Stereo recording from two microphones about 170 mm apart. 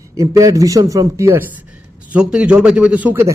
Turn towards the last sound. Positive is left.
turn(degrees=-10)  # may be behind; listen again after turning